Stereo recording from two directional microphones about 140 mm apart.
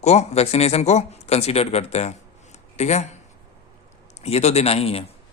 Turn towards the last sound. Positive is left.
turn(degrees=45)  # may be behind; listen again after turning